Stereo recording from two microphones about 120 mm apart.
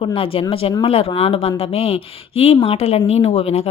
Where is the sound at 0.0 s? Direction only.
50° left (ahead or behind).